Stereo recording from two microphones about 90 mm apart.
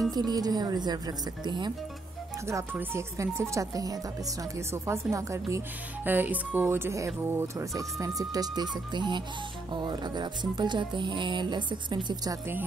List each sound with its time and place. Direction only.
0.1 s speech: 50° right (ahead or behind)
2.4 s speech: 25° right (ahead or behind)
6.0 s speech: 20° right (ahead or behind); by 8.6 s 45° right (ahead or behind)
8.7 s speech: 55° right (ahead or behind)